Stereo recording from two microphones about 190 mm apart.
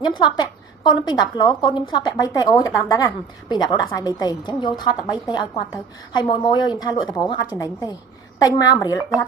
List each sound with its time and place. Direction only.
0.0 s speech: 25° left (ahead or behind)
6.1 s speech: 25° left (ahead or behind)